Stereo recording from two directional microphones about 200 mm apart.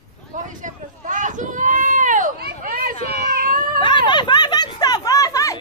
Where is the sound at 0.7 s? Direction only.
40° right (ahead or behind).